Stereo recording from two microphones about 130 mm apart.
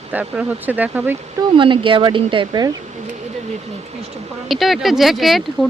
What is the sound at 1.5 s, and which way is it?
Speech, 40° right (ahead or behind).